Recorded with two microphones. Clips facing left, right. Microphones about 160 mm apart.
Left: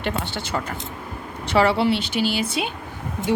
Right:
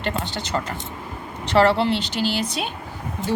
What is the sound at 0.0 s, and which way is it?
Speech, 10° left (ahead or behind).